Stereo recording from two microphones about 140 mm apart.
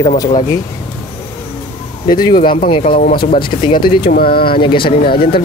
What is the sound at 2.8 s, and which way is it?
Speech, 85° left.